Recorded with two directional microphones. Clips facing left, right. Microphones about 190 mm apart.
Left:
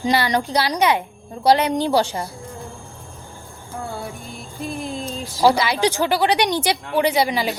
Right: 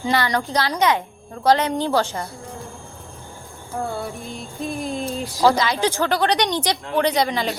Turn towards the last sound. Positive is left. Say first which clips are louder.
# left 1 dB
turn(degrees=10)  # may be behind; listen again after turning